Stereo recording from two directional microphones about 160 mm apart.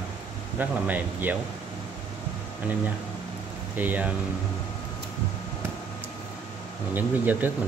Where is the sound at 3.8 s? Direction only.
10° right (ahead or behind).